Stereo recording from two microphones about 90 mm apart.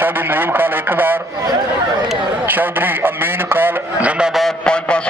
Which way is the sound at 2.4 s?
20° right (ahead or behind).